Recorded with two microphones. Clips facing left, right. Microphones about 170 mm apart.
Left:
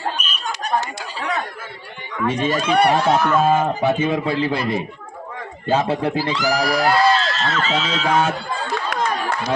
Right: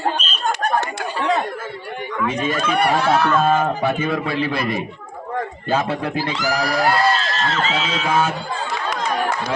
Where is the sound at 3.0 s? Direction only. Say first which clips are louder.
Even; 15° left (ahead or behind).